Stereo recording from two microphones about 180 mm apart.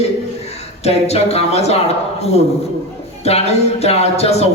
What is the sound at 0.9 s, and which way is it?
Speech, 35° left (ahead or behind).